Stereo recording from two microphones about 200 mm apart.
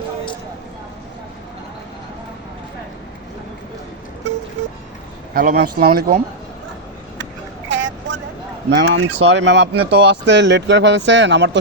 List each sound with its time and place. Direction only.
5.3 s speech: 40° right (ahead or behind)
7.7 s vehicle: 65° right (ahead or behind)
8.8 s speech: 60° right (ahead or behind)